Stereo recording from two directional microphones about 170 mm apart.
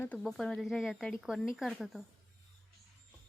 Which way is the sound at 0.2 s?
Centre (ahead or behind).